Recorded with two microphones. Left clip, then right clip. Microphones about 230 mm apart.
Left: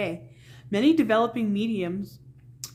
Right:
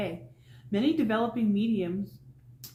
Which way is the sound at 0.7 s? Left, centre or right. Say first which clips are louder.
Left 6 dB; left.